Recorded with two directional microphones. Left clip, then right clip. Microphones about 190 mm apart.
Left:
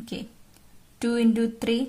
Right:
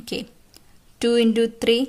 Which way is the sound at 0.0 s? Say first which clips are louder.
Right 7 dB; 20° right (ahead or behind).